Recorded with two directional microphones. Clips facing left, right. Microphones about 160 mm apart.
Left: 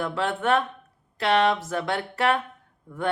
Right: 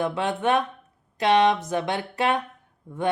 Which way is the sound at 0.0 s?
20° right (ahead or behind).